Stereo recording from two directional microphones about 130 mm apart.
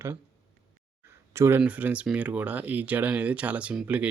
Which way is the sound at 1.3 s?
20° right (ahead or behind).